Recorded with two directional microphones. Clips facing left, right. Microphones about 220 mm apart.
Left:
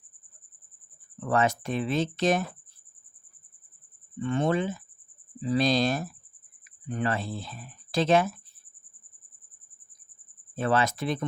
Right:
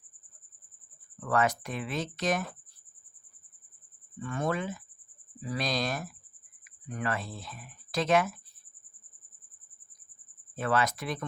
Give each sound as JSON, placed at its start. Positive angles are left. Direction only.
{"t": 1.2, "sound": "speech", "side_deg": 25}
{"t": 4.2, "sound": "speech", "side_deg": 25}
{"t": 10.5, "sound": "speech", "side_deg": 30}